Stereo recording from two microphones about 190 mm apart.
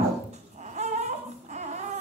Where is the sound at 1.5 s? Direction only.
35° right (ahead or behind).